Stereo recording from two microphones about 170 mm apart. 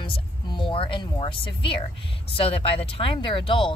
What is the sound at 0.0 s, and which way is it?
Speech, 30° left (ahead or behind).